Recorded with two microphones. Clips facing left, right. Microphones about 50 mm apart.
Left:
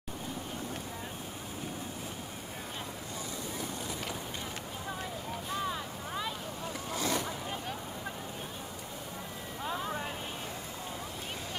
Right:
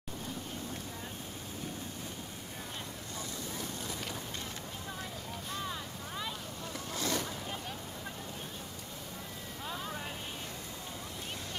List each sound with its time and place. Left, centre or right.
3.5 s vehicle: centre
5.5 s vehicle: centre
6.9 s boat: centre
9.7 s vehicle: centre